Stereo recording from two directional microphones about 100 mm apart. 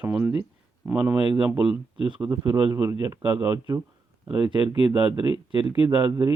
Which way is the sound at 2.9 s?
25° right (ahead or behind).